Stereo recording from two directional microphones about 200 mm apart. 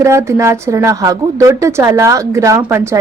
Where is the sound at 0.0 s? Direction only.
15° right (ahead or behind).